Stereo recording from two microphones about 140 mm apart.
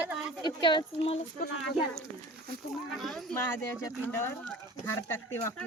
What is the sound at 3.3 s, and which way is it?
Speech, 20° left (ahead or behind).